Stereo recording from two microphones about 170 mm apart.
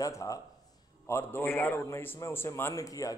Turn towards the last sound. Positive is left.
turn(degrees=20)  # may be behind; listen again after turning